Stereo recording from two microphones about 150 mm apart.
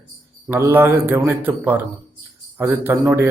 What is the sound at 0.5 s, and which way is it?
Speech, 15° right (ahead or behind).